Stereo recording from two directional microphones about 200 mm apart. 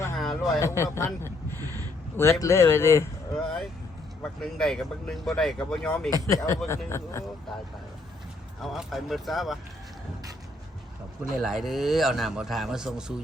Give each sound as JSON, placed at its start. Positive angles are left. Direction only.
{"t": 0.2, "sound": "a sound", "side_deg": 0}
{"t": 0.6, "sound": "speech", "side_deg": 15}
{"t": 1.5, "sound": "a sound", "side_deg": -15}
{"t": 2.1, "sound": "speech", "side_deg": 15}
{"t": 3.3, "sound": "speech", "side_deg": 0}
{"t": 8.6, "sound": "speech", "side_deg": 0}
{"t": 11.2, "sound": "speech", "side_deg": -5}